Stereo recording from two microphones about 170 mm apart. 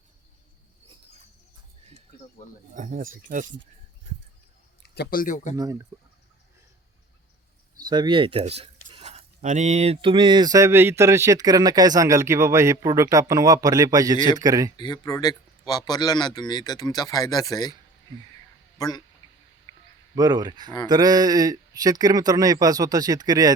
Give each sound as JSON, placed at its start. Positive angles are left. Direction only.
{"t": 2.7, "sound": "speech", "side_deg": -50}
{"t": 4.8, "sound": "speech", "side_deg": 65}
{"t": 5.5, "sound": "speech", "side_deg": -20}
{"t": 7.9, "sound": "speech", "side_deg": -25}
{"t": 14.8, "sound": "speech", "side_deg": 25}
{"t": 18.8, "sound": "speech", "side_deg": 25}
{"t": 20.1, "sound": "speech", "side_deg": -20}